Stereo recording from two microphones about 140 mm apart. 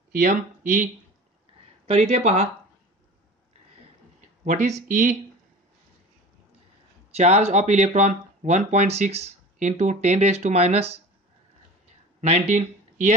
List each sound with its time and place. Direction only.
0.1 s speech: 65° right (ahead or behind)
1.9 s speech: 50° right (ahead or behind)
4.5 s speech: 60° right (ahead or behind)
7.2 s speech: 50° right (ahead or behind)
12.2 s speech: 55° right (ahead or behind)